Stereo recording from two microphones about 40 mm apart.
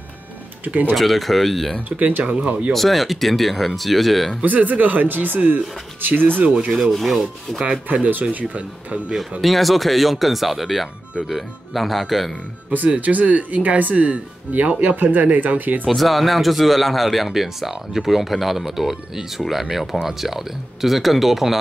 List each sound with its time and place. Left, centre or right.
0.9 s speech: centre
1.9 s speech: right
2.7 s speech: centre
4.4 s speech: right
7.1 s speech: centre
7.9 s speech: right
9.4 s speech: centre
12.7 s speech: right
15.0 s speech: right
15.9 s speech: centre